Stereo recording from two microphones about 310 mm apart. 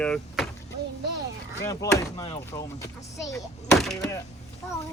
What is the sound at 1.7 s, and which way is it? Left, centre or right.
Speech, centre.